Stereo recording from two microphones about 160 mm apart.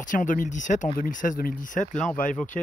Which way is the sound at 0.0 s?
55° left (ahead or behind).